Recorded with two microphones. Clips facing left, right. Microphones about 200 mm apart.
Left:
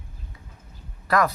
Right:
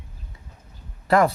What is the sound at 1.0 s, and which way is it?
Speech, 25° right (ahead or behind).